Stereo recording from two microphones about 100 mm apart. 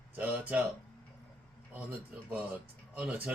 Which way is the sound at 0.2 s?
15° right (ahead or behind).